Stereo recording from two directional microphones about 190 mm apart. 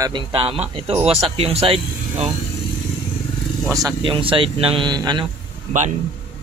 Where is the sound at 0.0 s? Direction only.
25° right (ahead or behind).